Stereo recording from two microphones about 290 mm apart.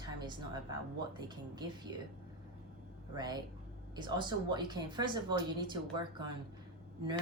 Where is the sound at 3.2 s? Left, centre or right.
Centre.